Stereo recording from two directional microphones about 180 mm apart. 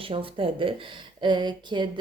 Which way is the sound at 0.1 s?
30° right (ahead or behind).